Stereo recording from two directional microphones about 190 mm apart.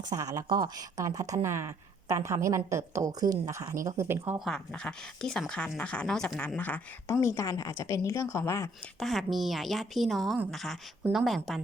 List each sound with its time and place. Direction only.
0.1 s speech: 20° right (ahead or behind)
4.4 s speech: centre (ahead or behind)
9.0 s speech: centre (ahead or behind)